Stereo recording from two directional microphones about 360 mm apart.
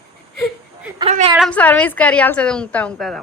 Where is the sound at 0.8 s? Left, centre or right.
Centre.